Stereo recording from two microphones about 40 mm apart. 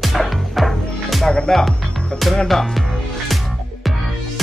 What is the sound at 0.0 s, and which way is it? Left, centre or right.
Music, centre.